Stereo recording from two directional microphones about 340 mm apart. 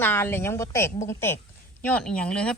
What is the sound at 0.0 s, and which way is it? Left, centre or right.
A woman's voice, centre.